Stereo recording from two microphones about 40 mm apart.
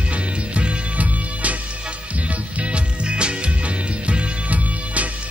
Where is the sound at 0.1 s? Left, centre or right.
Right.